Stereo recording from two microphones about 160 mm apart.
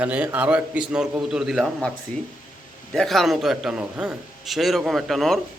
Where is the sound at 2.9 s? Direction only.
Centre (ahead or behind).